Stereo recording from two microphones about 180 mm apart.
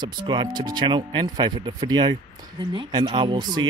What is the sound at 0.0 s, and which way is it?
Speech, 25° right (ahead or behind).